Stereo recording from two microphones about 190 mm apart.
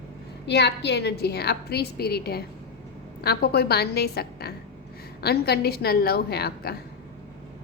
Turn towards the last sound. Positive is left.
turn(degrees=55)  # may be behind; listen again after turning